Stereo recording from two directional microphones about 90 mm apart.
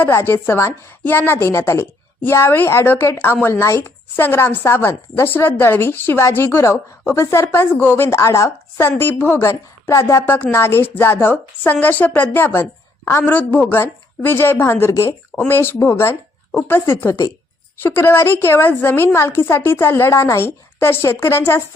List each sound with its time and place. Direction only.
0.0 s speech: 25° left (ahead or behind)